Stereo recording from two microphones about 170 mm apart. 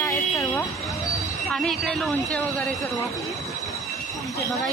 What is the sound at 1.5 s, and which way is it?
A woman's voice, centre (ahead or behind).